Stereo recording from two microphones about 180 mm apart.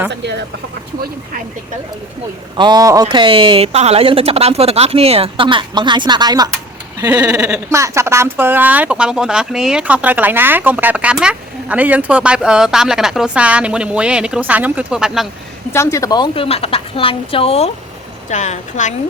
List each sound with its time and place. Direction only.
0.1 s speech: 70° right (ahead or behind)
2.6 s speech: 20° right (ahead or behind); by 15.3 s 5° right (ahead or behind)
15.7 s a woman's voice: 15° left (ahead or behind); by 18.9 s 40° left (ahead or behind)